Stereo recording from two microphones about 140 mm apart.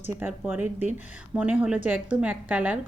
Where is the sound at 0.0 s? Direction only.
15° right (ahead or behind).